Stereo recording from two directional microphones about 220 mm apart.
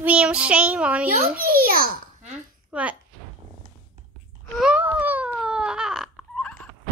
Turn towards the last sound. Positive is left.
turn(degrees=0)  # may be behind; listen again after turning